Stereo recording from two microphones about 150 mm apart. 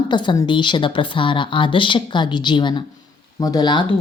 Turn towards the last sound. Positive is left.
turn(degrees=30)  # may be behind; listen again after turning